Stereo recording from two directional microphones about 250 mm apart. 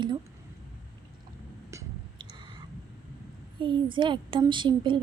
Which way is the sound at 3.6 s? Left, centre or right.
Right.